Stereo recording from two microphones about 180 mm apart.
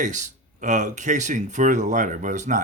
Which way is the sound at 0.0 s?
45° right (ahead or behind).